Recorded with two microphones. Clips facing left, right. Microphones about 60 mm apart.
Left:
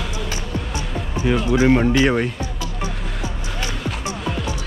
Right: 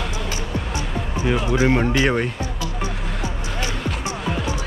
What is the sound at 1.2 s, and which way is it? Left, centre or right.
Speech, centre.